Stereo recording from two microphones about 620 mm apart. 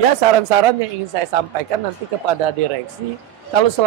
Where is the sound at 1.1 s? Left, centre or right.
Right.